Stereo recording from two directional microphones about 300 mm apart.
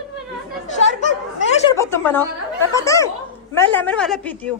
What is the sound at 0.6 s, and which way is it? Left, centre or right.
Speech, left.